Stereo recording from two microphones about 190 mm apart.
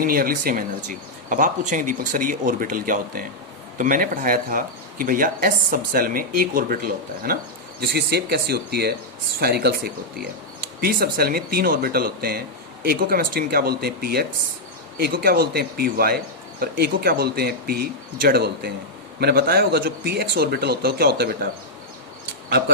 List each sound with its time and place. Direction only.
0.0 s speech: 50° right (ahead or behind)
10.8 s speech: 50° right (ahead or behind)